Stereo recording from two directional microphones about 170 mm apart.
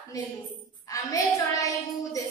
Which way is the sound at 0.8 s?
20° left (ahead or behind).